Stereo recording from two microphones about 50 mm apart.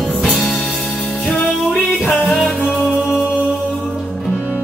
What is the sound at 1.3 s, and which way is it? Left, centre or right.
Music, centre.